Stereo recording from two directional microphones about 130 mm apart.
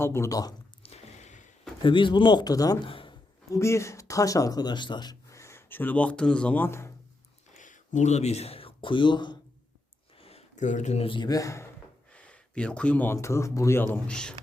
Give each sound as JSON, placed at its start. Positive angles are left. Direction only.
{"t": 0.0, "sound": "speech", "side_deg": 20}
{"t": 0.8, "sound": "squish", "side_deg": 55}
{"t": 1.8, "sound": "speech", "side_deg": 40}
{"t": 2.8, "sound": "a sound", "side_deg": 40}
{"t": 3.5, "sound": "speech", "side_deg": 20}
{"t": 7.5, "sound": "speech", "side_deg": 75}
{"t": 10.2, "sound": "a sound", "side_deg": 50}
{"t": 11.0, "sound": "speech", "side_deg": 40}
{"t": 12.1, "sound": "a sound", "side_deg": 10}
{"t": 13.1, "sound": "speech", "side_deg": 25}